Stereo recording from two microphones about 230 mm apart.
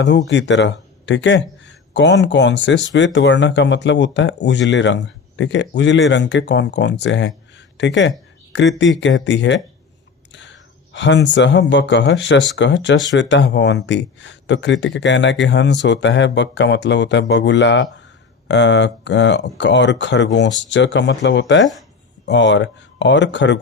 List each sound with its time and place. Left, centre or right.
0.3 s speech: left